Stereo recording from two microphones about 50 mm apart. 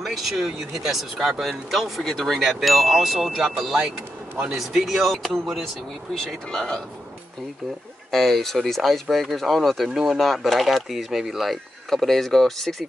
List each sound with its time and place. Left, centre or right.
0.0 s speech: centre
1.4 s speech: centre
4.6 s speech: centre
6.1 s speech: centre
8.1 s speech: centre